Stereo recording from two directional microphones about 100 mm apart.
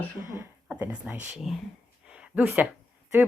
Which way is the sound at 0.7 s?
15° right (ahead or behind).